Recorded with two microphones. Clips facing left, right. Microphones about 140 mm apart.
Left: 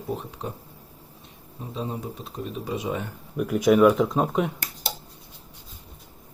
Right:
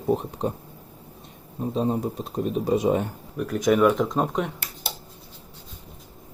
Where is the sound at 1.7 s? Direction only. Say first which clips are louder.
Right 7 dB; 40° right (ahead or behind).